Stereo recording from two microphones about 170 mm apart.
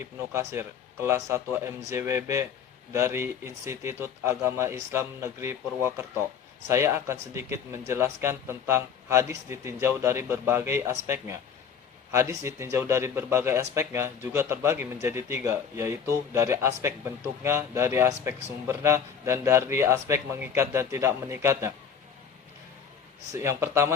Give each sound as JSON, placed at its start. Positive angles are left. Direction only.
{"t": 0.0, "sound": "speech", "side_deg": -15}
{"t": 23.3, "sound": "speech", "side_deg": -15}